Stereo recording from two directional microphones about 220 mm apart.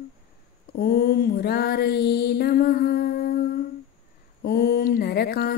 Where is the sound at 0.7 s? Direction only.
45° left (ahead or behind).